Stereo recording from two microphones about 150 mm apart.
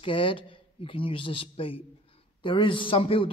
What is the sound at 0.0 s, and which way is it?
A man's voice, 35° left (ahead or behind).